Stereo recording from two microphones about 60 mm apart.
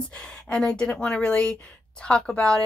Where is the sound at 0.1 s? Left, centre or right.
Centre.